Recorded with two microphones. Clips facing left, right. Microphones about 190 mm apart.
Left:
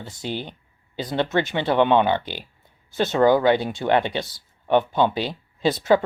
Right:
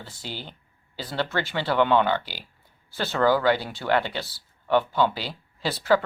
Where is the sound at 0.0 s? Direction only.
20° left (ahead or behind).